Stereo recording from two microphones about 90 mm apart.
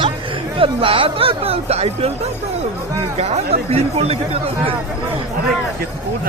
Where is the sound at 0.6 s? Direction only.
80° right.